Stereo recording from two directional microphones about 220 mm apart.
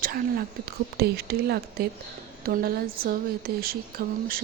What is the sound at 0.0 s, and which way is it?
Speech, 40° right (ahead or behind).